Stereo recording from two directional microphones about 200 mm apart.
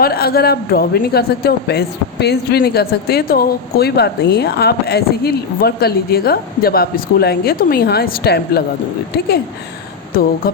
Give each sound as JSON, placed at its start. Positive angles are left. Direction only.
{"t": 0.0, "sound": "a man's voice", "side_deg": 50}
{"t": 10.1, "sound": "speech", "side_deg": 45}